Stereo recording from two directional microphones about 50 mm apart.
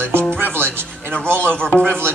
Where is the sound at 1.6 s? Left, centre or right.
Centre.